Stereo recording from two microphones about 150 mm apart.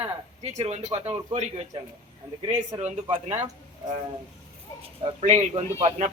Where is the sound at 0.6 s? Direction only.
45° right (ahead or behind).